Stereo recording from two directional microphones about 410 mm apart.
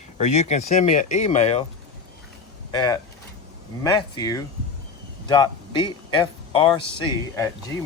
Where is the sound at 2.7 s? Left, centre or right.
Centre.